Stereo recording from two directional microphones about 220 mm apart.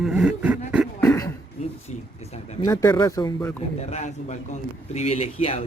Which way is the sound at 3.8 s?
30° left (ahead or behind).